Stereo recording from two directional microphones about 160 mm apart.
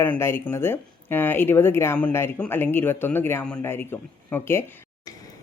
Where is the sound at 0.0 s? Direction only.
15° left (ahead or behind).